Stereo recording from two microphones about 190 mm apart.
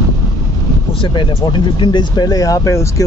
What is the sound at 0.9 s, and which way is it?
Speech, 25° left (ahead or behind).